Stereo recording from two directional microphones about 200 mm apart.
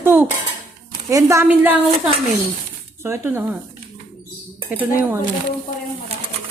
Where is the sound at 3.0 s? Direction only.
10° right (ahead or behind).